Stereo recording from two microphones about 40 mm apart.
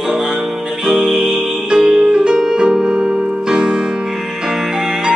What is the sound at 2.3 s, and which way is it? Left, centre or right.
Music, centre.